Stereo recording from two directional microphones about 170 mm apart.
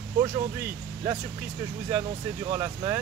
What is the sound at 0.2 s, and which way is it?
Speech, 15° right (ahead or behind).